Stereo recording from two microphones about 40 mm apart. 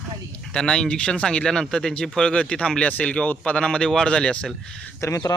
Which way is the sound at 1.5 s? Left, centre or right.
Centre.